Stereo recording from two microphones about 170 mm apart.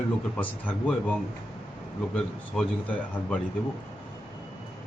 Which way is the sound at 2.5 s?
10° left (ahead or behind).